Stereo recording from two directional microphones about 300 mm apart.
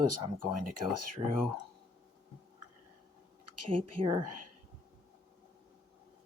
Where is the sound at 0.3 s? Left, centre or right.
Right.